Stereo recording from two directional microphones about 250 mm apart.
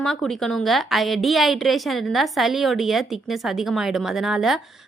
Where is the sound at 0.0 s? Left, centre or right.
Centre.